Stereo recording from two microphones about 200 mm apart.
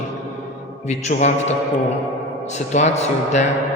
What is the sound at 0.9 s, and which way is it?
Speech, 35° left (ahead or behind).